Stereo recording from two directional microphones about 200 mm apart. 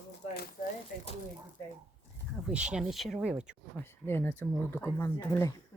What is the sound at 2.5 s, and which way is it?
Speech, 5° right (ahead or behind).